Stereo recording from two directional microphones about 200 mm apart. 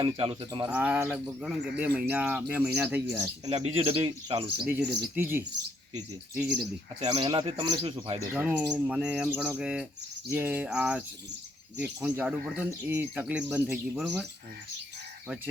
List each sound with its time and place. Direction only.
0.0 s speech: 25° right (ahead or behind)
0.7 s bird: 5° right (ahead or behind)
1.8 s speech: 10° right (ahead or behind)
3.7 s speech: 25° right (ahead or behind)
4.8 s speech: 55° right (ahead or behind)
5.1 s speech: 10° right (ahead or behind)
7.0 s speech: 30° right (ahead or behind)
8.3 s bird: 5° right (ahead or behind)
10.2 s speech: 10° right (ahead or behind)